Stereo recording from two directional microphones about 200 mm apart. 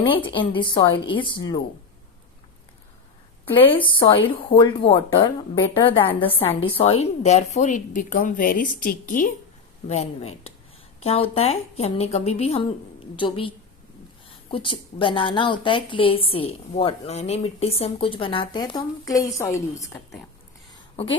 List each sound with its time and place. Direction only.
0.3 s a woman's voice: 25° left (ahead or behind)
3.5 s a woman's voice: 25° left (ahead or behind)
14.5 s a woman's voice: 25° left (ahead or behind)